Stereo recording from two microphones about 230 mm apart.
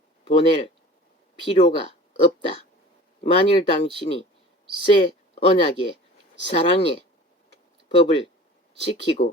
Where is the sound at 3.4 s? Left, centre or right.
Left.